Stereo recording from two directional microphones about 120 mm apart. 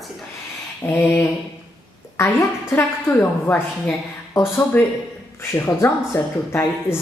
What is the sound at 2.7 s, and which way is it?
A woman's voice, 15° left (ahead or behind).